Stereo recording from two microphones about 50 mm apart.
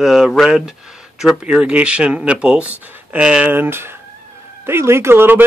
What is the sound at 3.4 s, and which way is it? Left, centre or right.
Speech, right.